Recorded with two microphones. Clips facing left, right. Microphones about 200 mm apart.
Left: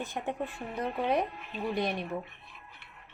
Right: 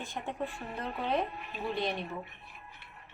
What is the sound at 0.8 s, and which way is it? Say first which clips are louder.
Speech: left 3 dB; 15° left (ahead or behind).